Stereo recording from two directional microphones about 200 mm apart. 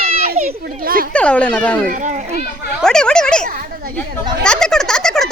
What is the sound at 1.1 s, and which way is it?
Speech, 5° left (ahead or behind).